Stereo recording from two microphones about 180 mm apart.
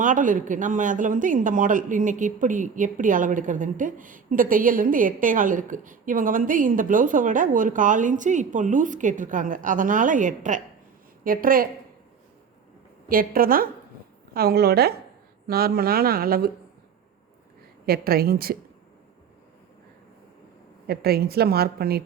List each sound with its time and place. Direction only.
0.0 s speech: 45° right (ahead or behind)
13.1 s a woman's voice: 55° right (ahead or behind)
17.8 s a woman's voice: 55° right (ahead or behind)
20.8 s a woman's voice: 60° right (ahead or behind)